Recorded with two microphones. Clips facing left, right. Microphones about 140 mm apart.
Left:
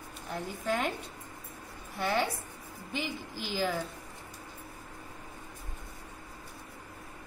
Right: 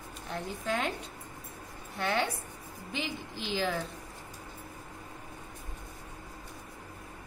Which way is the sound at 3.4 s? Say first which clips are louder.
Even; 10° left (ahead or behind).